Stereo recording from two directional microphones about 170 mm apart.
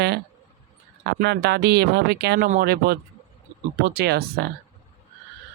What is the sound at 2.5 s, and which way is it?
Speech, 65° right (ahead or behind).